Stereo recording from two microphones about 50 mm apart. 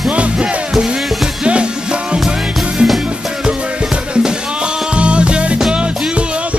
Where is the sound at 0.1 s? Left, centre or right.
Right.